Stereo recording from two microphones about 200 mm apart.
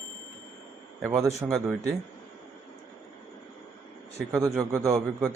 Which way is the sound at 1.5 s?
Centre (ahead or behind).